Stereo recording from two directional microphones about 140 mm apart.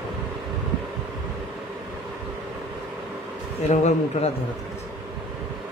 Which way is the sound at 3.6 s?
55° left (ahead or behind).